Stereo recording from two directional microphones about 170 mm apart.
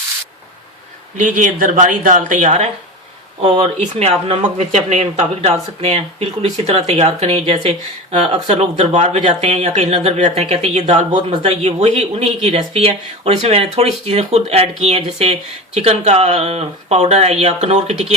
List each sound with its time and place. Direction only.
1.1 s speech: 50° right (ahead or behind)